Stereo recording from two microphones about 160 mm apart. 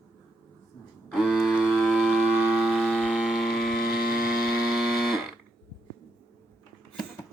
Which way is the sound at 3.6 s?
70° left (ahead or behind).